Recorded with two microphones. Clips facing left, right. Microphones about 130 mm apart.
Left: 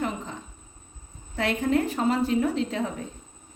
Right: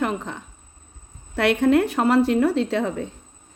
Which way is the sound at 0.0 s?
70° right (ahead or behind).